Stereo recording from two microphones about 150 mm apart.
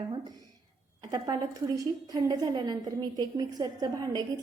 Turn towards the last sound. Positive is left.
turn(degrees=-25)  # may be behind; listen again after turning